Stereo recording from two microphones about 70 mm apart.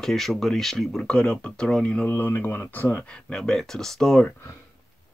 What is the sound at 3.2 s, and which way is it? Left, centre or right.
Speech, centre.